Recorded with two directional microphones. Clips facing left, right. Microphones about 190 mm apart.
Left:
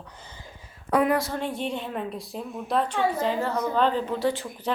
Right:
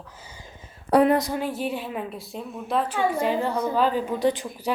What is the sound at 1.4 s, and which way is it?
A woman's voice, 5° right (ahead or behind).